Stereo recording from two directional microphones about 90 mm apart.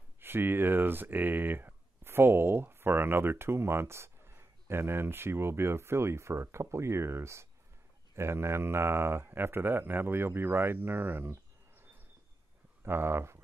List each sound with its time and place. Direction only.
0.2 s speech: 25° right (ahead or behind)
12.8 s speech: 25° right (ahead or behind)